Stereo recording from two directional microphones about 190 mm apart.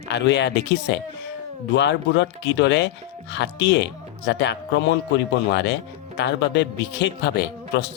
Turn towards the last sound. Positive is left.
turn(degrees=60)  # may be behind; listen again after turning